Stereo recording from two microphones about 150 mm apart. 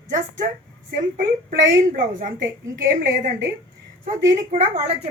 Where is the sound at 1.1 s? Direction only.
70° right (ahead or behind); by 4.8 s 55° right (ahead or behind).